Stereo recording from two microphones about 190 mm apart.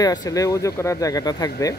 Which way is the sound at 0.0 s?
20° left (ahead or behind).